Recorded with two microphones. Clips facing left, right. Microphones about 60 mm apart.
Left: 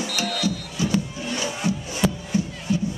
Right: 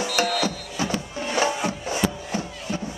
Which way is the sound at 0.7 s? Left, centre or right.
Right.